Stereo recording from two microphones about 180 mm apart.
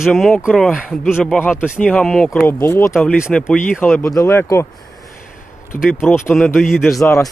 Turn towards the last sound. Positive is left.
turn(degrees=15)  # may be behind; listen again after turning